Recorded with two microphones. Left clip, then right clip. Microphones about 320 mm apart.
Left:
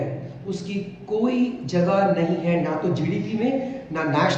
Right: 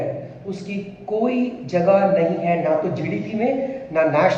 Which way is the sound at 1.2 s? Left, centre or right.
Centre.